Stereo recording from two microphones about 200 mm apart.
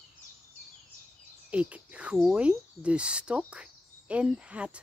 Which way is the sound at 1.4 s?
5° right (ahead or behind).